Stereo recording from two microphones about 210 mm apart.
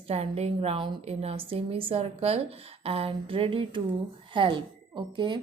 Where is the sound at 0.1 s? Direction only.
30° right (ahead or behind).